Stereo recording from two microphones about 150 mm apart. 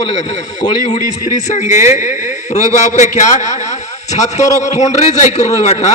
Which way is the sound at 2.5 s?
50° left (ahead or behind).